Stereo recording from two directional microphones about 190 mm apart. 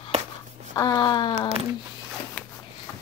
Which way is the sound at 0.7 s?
20° left (ahead or behind).